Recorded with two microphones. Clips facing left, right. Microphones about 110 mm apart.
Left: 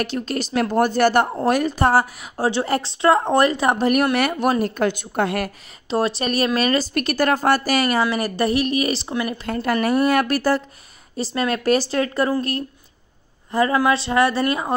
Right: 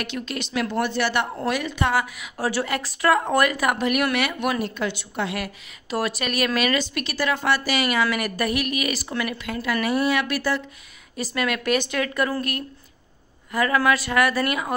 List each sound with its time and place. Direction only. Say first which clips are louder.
0.0 s a woman's voice: left 6 dB; 40° left (ahead or behind)
5.9 s a woman's voice: left 5 dB; 30° left (ahead or behind)
9.5 s a woman's voice: left 5 dB; 45° left (ahead or behind)
11.1 s a woman's voice: left 3 dB; 30° left (ahead or behind)